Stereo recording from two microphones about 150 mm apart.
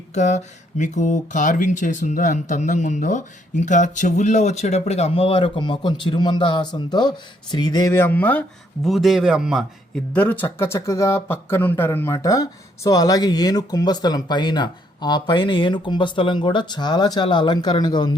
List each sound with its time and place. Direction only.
0.1 s speech: 50° left (ahead or behind); by 8.4 s 10° left (ahead or behind)
8.8 s speech: centre (ahead or behind)
9.9 s speech: 10° left (ahead or behind); by 18.2 s 30° left (ahead or behind)